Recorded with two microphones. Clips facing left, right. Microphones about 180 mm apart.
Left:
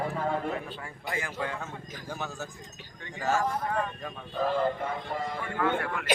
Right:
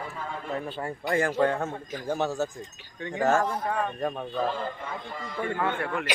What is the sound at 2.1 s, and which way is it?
Speech, 65° right (ahead or behind).